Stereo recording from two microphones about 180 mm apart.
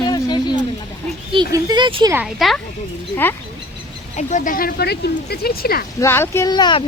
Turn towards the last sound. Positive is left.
turn(degrees=25)  # may be behind; listen again after turning